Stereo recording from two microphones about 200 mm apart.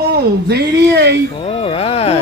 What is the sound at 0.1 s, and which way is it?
Speech, 55° right (ahead or behind).